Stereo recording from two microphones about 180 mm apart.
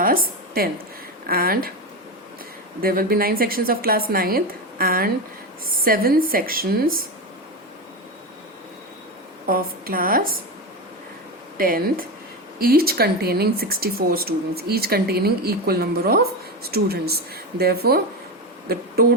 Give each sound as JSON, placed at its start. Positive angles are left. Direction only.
{"t": 0.0, "sound": "a sound", "side_deg": -55}
{"t": 1.3, "sound": "speech", "side_deg": -55}
{"t": 2.8, "sound": "speech", "side_deg": -55}
{"t": 9.5, "sound": "a woman's voice", "side_deg": -55}
{"t": 11.5, "sound": "a woman's voice", "side_deg": -55}